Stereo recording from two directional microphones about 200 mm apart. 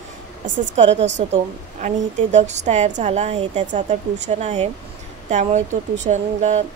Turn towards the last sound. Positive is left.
turn(degrees=-35)  # may be behind; listen again after turning